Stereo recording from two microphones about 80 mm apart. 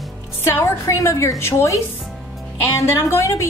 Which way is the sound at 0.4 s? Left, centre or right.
Left.